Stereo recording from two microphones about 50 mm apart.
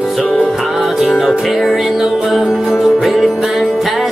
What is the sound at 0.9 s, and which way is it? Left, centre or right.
Music, centre.